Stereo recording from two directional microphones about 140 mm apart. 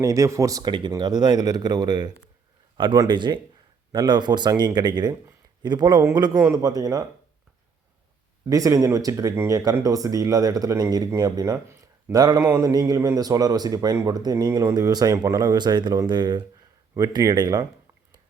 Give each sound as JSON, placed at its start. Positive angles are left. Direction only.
{"t": 0.0, "sound": "speech", "side_deg": -25}
{"t": 8.4, "sound": "speech", "side_deg": -25}